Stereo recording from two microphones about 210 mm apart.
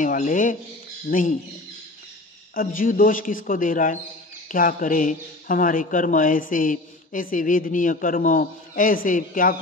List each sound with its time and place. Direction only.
0.0 s speech: 40° left (ahead or behind)
2.5 s speech: 40° left (ahead or behind)